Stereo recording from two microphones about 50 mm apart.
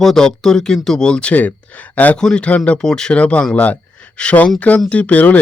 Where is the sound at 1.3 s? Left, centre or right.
Left.